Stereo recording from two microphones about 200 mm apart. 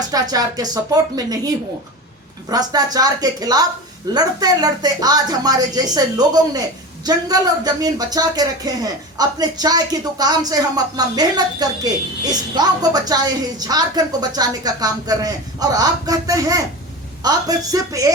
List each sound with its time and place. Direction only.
0.1 s a woman's voice: 20° right (ahead or behind)